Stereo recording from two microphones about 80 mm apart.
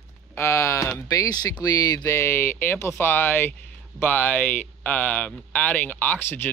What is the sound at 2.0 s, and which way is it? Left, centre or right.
Speech, left.